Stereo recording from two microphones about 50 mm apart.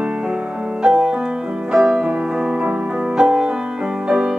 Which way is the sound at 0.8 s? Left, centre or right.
Centre.